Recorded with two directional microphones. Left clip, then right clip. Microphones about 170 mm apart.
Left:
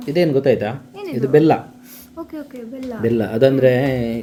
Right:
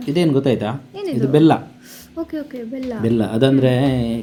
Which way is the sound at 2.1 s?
15° right (ahead or behind).